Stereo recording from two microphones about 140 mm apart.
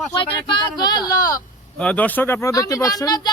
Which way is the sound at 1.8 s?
10° left (ahead or behind).